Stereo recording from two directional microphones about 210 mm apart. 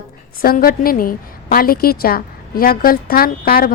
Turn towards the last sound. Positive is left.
turn(degrees=45)  # may be behind; listen again after turning